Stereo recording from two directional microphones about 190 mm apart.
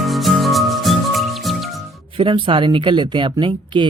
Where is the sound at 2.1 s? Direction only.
25° right (ahead or behind).